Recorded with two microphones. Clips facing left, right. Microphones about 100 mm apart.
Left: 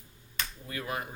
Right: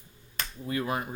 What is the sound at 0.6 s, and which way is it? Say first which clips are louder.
Speech: right 7 dB; 25° right (ahead or behind).